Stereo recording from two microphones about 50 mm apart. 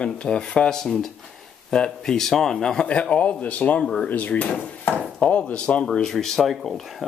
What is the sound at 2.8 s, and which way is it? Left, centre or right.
Speech, left.